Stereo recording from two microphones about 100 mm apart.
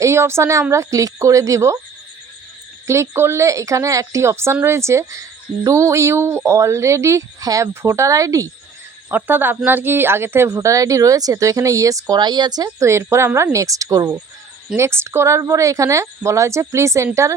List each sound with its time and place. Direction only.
0.0 s speech: 25° right (ahead or behind)
2.8 s speech: 30° right (ahead or behind)
9.0 s speech: 20° right (ahead or behind); by 14.2 s 40° right (ahead or behind)
14.8 s speech: 25° right (ahead or behind)